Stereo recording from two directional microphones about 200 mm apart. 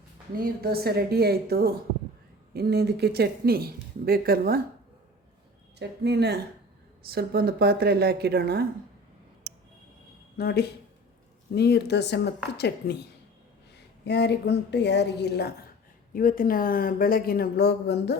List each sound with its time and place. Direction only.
0.4 s speech: 50° right (ahead or behind)
5.8 s speech: 55° right (ahead or behind)
10.3 s a woman's voice: 50° left (ahead or behind)
14.0 s a woman's voice: 60° left (ahead or behind)
16.1 s speech: 45° left (ahead or behind)